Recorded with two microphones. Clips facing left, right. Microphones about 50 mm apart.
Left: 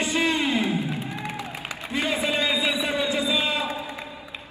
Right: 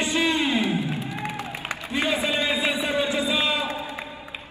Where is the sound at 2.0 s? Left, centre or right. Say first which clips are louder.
Even; right.